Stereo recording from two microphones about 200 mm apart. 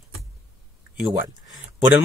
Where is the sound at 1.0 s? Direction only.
5° right (ahead or behind).